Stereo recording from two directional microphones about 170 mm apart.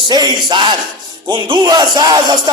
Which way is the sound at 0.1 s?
25° right (ahead or behind).